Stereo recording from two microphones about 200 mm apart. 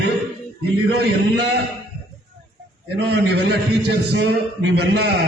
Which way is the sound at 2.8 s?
55° right (ahead or behind).